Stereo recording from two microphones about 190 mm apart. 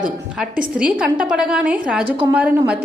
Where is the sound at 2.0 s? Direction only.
30° right (ahead or behind).